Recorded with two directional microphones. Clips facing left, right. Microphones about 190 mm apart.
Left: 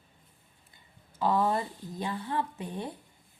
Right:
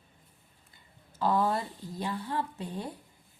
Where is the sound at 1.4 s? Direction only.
20° left (ahead or behind).